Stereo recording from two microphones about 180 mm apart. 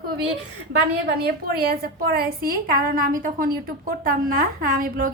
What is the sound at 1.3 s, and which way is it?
A woman's voice, 60° right (ahead or behind).